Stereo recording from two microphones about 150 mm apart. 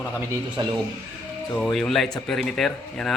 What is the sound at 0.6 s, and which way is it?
Speech, 30° right (ahead or behind).